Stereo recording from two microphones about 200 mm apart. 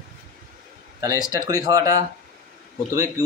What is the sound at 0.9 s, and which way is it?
A man's voice, 15° right (ahead or behind).